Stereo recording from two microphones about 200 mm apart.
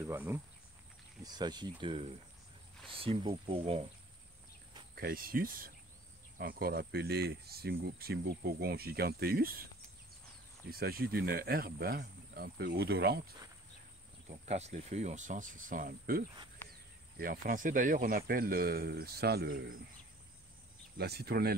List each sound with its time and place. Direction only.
0.0 s speech: 10° right (ahead or behind); by 3.8 s 30° right (ahead or behind)
4.9 s speech: 45° right (ahead or behind)
10.7 s speech: 50° right (ahead or behind)
14.5 s cricket: 35° right (ahead or behind)
17.2 s speech: 45° right (ahead or behind)
21.0 s speech: 55° right (ahead or behind)